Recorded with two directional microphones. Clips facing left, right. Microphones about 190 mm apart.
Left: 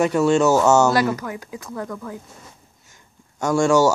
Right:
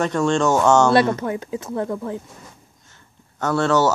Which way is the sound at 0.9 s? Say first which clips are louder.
Right 3 dB; 25° right (ahead or behind).